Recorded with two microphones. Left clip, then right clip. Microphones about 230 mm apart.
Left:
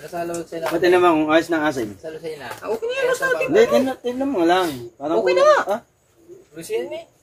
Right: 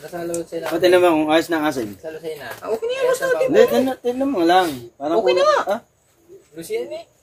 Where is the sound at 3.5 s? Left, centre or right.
Right.